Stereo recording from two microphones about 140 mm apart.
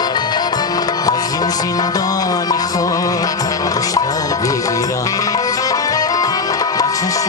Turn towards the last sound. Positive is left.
turn(degrees=25)  # may be behind; listen again after turning